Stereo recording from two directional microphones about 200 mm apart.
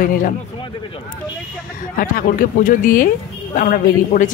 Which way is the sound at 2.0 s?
45° left (ahead or behind).